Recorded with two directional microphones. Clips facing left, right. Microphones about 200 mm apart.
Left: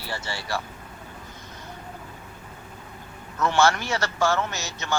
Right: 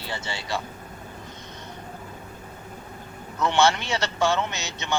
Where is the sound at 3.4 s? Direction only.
20° right (ahead or behind).